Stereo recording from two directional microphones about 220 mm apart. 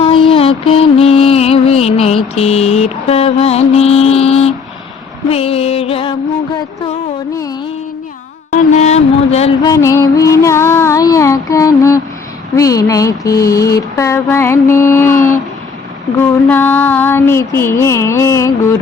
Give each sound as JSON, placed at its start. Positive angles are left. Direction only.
{"t": 0.0, "sound": "music", "side_deg": 25}
{"t": 8.7, "sound": "a sound", "side_deg": 30}
{"t": 9.6, "sound": "female singing", "side_deg": 15}
{"t": 12.5, "sound": "speech", "side_deg": 15}